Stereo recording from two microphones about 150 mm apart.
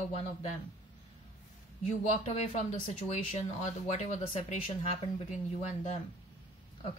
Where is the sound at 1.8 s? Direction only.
50° left (ahead or behind).